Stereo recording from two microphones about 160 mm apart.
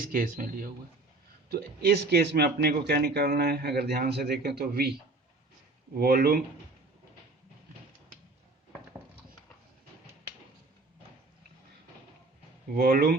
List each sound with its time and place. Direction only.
0.0 s speech: 60° right (ahead or behind)
1.5 s speech: 75° right (ahead or behind)
6.0 s speech: 70° right (ahead or behind)
12.7 s speech: 70° right (ahead or behind)